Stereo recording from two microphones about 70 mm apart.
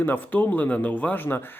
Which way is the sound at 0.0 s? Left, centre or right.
Left.